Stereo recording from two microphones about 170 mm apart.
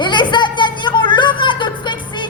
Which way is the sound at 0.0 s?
25° left (ahead or behind).